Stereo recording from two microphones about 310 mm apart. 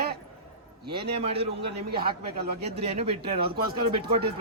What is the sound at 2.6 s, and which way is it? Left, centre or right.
Speech, centre.